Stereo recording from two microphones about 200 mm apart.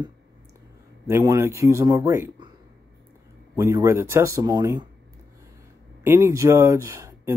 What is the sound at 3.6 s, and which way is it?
Speech, 15° right (ahead or behind).